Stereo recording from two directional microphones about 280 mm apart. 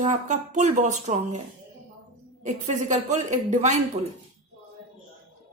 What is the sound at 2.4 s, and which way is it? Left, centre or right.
A woman's voice, right.